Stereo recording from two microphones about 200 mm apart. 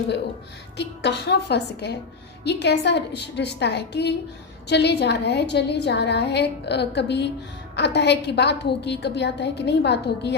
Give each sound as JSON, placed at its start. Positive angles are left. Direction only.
{"t": 0.8, "sound": "a woman's voice", "side_deg": 55}